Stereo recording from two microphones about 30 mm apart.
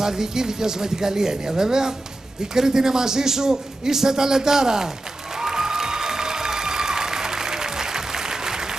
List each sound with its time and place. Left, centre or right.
0.0 s a man's voice: centre
5.4 s applause: centre